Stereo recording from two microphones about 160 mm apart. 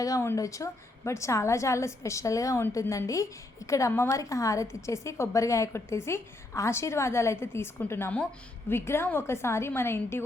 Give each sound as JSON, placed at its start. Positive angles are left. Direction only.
{"t": 0.0, "sound": "a woman's voice", "side_deg": 20}